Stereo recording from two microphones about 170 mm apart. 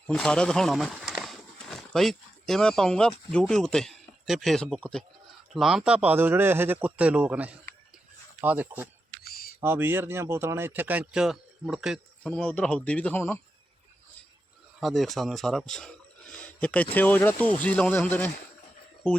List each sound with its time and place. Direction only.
0.1 s speech: 5° left (ahead or behind)
9.2 s typing: 60° left (ahead or behind)
9.6 s speech: 15° right (ahead or behind)
12.3 s speech: 10° left (ahead or behind)
14.8 s speech: centre (ahead or behind)